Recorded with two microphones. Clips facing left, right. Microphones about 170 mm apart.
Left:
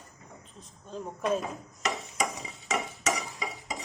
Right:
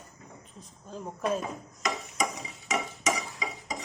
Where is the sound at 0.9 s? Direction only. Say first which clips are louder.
Left 1 dB; centre (ahead or behind).